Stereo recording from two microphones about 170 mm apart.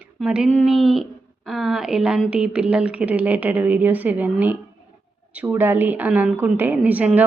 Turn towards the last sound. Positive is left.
turn(degrees=-10)  # may be behind; listen again after turning